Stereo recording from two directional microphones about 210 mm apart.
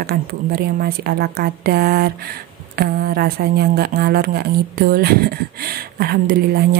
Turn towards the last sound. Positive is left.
turn(degrees=-45)  # may be behind; listen again after turning